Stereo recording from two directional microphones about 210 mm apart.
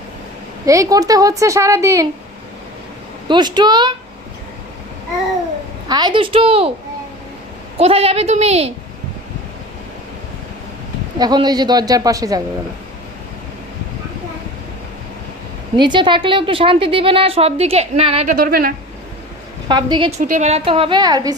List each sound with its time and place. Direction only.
0.6 s a woman's voice: 15° right (ahead or behind)
3.2 s a woman's voice: 20° right (ahead or behind)
5.9 s a woman's voice: 20° right (ahead or behind)
7.8 s a woman's voice: 25° right (ahead or behind)
11.2 s a woman's voice: 20° right (ahead or behind)
15.8 s a woman's voice: 20° right (ahead or behind)
18.3 s speech: 45° right (ahead or behind)
19.6 s a woman's voice: 20° right (ahead or behind)